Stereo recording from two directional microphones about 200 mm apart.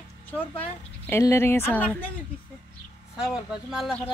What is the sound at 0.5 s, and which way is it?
Speech, 10° left (ahead or behind).